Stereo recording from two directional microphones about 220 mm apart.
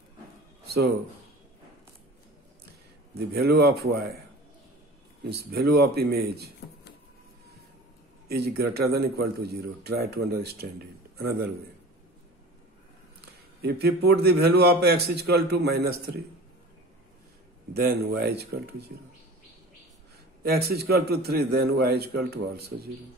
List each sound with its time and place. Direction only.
3.2 s a man's voice: 45° right (ahead or behind)
5.2 s a man's voice: 50° right (ahead or behind)
8.3 s a man's voice: 45° right (ahead or behind)
13.6 s a man's voice: 45° right (ahead or behind)
17.7 s a man's voice: 45° right (ahead or behind)
20.4 s a man's voice: 45° right (ahead or behind)